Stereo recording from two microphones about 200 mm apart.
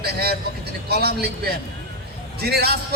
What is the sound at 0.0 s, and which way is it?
A man's voice, 50° right (ahead or behind).